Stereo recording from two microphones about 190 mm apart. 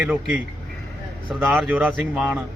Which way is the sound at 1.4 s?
Centre (ahead or behind).